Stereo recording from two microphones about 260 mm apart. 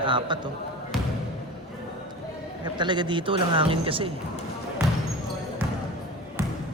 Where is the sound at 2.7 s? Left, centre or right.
Centre.